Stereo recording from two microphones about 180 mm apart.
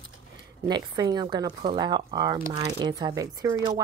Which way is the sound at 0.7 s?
25° right (ahead or behind).